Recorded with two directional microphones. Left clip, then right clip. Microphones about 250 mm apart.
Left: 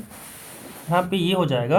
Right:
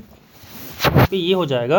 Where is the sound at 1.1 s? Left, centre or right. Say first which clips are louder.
Right 4 dB; right.